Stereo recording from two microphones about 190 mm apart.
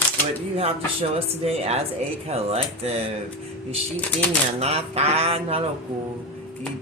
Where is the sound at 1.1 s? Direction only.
35° right (ahead or behind).